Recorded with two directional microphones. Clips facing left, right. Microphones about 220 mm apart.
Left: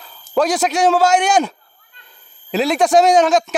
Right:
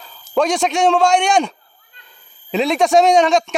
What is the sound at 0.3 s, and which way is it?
A man's voice, centre (ahead or behind).